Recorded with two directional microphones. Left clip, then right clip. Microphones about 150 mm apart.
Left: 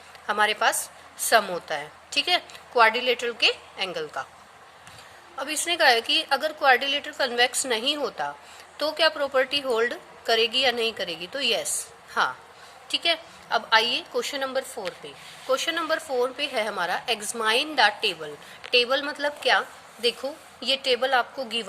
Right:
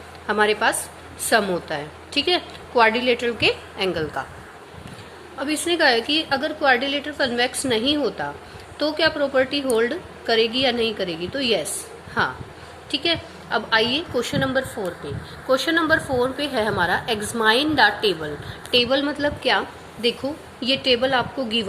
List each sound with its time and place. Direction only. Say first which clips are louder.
0.3 s a woman's voice: right 3 dB; 45° left (ahead or behind)
5.4 s a woman's voice: right 3 dB; 45° left (ahead or behind)
15.4 s a woman's voice: right 6 dB; 45° left (ahead or behind)